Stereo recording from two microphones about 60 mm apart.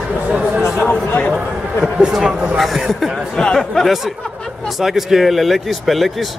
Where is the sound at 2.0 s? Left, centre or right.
Centre.